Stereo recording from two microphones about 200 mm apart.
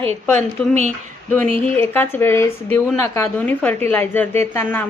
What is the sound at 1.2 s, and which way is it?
A woman's voice, 10° left (ahead or behind).